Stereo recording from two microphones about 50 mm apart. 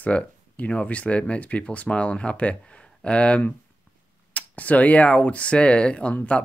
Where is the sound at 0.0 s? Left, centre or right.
Left.